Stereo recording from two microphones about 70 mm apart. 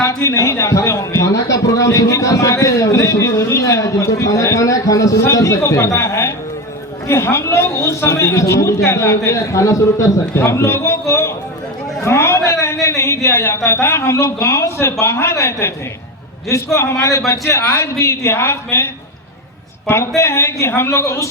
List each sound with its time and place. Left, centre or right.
0.1 s a man's voice: left
12.0 s a sound: left
13.2 s speech: left
16.7 s a man's voice: left
19.9 s speech: left